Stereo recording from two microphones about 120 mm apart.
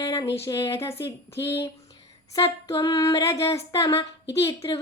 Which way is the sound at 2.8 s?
25° left (ahead or behind).